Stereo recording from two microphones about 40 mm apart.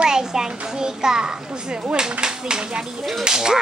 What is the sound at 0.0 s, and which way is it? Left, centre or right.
A child's voice, centre.